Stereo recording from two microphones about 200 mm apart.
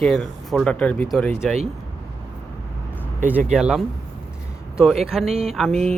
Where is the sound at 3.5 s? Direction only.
5° right (ahead or behind).